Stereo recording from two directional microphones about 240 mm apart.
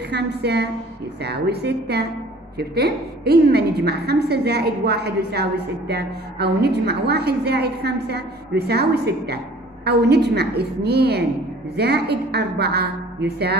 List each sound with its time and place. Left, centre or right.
0.1 s a woman's voice: right